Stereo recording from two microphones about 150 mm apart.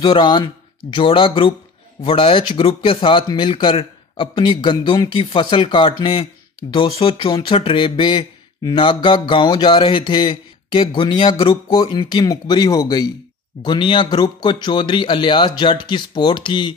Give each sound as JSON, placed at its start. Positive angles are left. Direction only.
{"t": 0.0, "sound": "speech", "side_deg": 30}